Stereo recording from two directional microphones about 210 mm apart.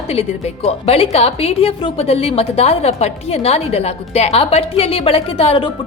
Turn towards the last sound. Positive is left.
turn(degrees=25)  # may be behind; listen again after turning